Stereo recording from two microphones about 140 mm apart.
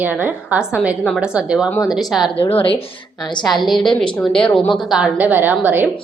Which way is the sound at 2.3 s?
40° left (ahead or behind).